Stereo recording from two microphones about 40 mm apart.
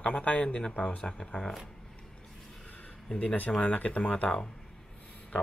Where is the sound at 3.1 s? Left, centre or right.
Left.